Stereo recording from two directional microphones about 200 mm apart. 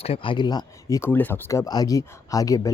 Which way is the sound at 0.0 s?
25° left (ahead or behind).